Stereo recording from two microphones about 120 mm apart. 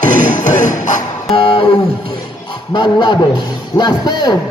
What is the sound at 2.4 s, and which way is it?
Speech, 40° left (ahead or behind).